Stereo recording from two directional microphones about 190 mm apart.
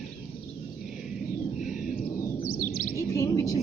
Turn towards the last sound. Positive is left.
turn(degrees=20)  # may be behind; listen again after turning